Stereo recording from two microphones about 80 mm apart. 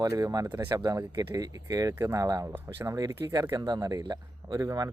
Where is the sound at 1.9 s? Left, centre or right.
Right.